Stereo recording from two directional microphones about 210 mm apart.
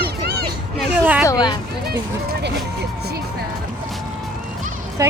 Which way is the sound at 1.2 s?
20° left (ahead or behind).